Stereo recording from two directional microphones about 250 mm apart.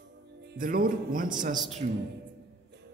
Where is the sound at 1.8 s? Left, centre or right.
Right.